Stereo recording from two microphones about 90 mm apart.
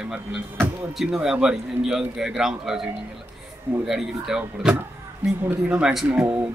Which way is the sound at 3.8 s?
5° right (ahead or behind).